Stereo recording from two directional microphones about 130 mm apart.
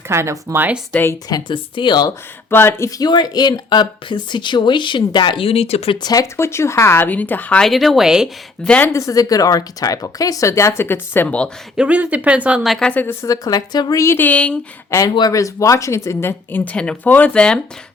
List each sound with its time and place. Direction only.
0.1 s speech: 20° right (ahead or behind)
1.3 s speech: 40° left (ahead or behind)
2.5 s speech: 15° left (ahead or behind)
3.0 s speech: 30° left (ahead or behind); by 6.0 s 50° left (ahead or behind)
6.0 s speech: 30° left (ahead or behind)
6.3 s speech: 20° left (ahead or behind)
7.6 s speech: centre (ahead or behind)
8.6 s speech: 10° left (ahead or behind)
8.9 s speech: 25° left (ahead or behind); by 11.5 s 10° left (ahead or behind)
11.8 s speech: 10° right (ahead or behind)
12.9 s speech: 15° left (ahead or behind)
13.2 s speech: 30° left (ahead or behind)
14.0 s speech: 15° left (ahead or behind)
14.8 s speech: 20° left (ahead or behind)